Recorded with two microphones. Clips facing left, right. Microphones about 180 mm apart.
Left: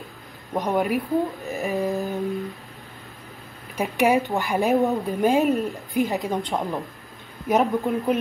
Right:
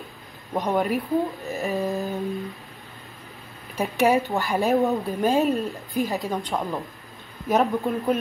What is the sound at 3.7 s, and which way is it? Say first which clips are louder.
A woman's voice: even; 15° left (ahead or behind).